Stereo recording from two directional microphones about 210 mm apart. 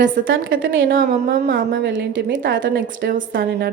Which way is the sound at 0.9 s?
45° right (ahead or behind).